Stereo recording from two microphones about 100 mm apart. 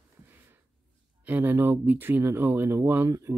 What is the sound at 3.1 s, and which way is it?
Speech, 30° right (ahead or behind).